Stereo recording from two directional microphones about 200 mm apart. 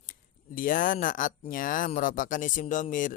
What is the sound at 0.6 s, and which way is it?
Speech, 45° left (ahead or behind).